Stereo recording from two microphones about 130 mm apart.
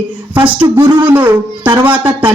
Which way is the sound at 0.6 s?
30° right (ahead or behind).